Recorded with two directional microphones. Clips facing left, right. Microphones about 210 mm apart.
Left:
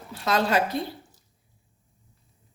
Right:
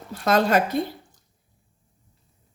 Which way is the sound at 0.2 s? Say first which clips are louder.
Right 4 dB; 50° right (ahead or behind).